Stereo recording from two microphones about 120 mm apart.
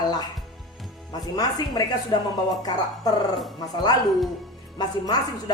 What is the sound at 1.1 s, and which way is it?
A woman's voice, 35° left (ahead or behind).